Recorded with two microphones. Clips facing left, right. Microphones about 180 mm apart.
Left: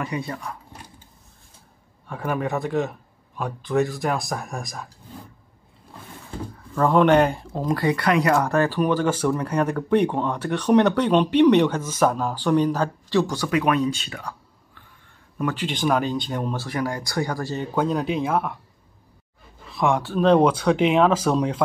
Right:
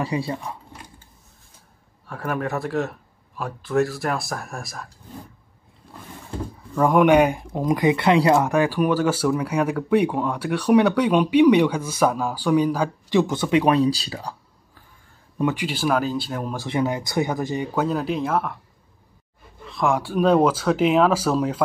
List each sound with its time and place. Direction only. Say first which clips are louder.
0.0 s speech: right 3 dB; 30° right (ahead or behind)
2.0 s speech: left 1 dB; centre (ahead or behind)
6.7 s speech: right 1 dB; 10° right (ahead or behind); by 14.3 s 35° right (ahead or behind)
15.4 s speech: right 1 dB; 10° right (ahead or behind)
16.5 s speech: right 3 dB; 20° right (ahead or behind)
17.7 s speech: left 2 dB; 5° right (ahead or behind)
19.7 s speech: even; centre (ahead or behind)
20.0 s speech: left 1 dB; 10° right (ahead or behind)